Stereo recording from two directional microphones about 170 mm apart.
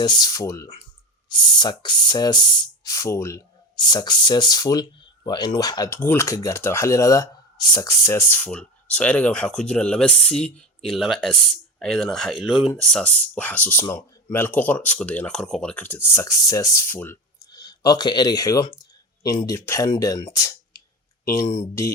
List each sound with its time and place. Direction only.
0.0 s speech: 25° left (ahead or behind)
17.5 s speech: 25° left (ahead or behind)